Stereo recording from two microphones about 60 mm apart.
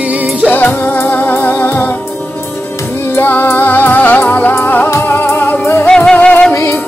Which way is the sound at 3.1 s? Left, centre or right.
Left.